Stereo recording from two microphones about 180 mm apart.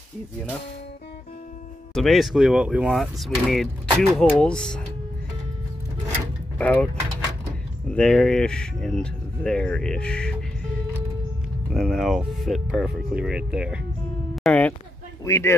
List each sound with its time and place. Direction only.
2.0 s speech: centre (ahead or behind)
6.6 s speech: 5° left (ahead or behind)
7.9 s speech: 5° left (ahead or behind)
11.7 s speech: centre (ahead or behind)
14.3 s music: 5° left (ahead or behind)
15.2 s speech: 15° left (ahead or behind)